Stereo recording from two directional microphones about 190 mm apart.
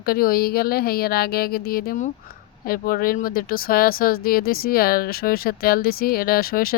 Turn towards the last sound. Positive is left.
turn(degrees=50)  # may be behind; listen again after turning